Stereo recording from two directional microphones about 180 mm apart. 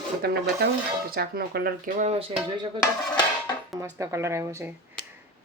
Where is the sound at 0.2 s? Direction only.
60° right (ahead or behind).